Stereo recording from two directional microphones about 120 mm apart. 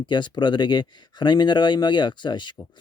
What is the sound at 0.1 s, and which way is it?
Speech, 40° left (ahead or behind).